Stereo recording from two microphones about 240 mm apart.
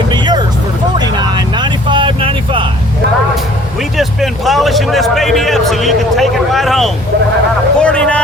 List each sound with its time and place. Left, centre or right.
0.1 s music: centre
0.9 s vehicle: centre
3.9 s a sound: centre
7.8 s vehicle: centre